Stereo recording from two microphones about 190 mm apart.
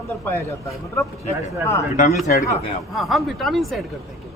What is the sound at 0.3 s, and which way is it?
Speech, 15° left (ahead or behind).